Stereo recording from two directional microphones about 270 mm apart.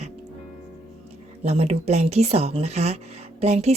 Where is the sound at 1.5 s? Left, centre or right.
Right.